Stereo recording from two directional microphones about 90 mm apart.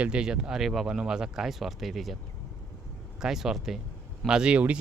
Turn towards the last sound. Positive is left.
turn(degrees=-15)  # may be behind; listen again after turning